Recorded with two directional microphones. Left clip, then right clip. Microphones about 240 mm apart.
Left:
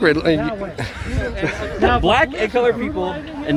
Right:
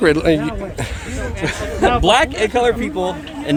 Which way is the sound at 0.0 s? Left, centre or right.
Centre.